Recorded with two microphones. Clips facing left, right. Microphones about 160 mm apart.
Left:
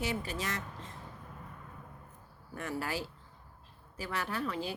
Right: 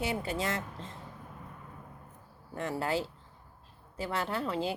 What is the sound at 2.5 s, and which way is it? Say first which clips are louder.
Speech: right 5 dB; 25° right (ahead or behind).